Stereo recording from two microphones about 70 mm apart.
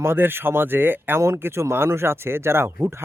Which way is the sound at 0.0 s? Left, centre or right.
Right.